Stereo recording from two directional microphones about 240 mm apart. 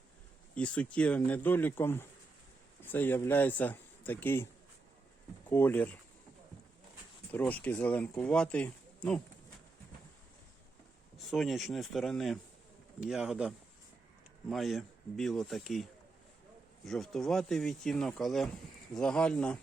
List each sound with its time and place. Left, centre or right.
0.5 s speech: centre
5.5 s speech: centre
7.3 s speech: centre
11.2 s speech: centre
14.5 s speech: centre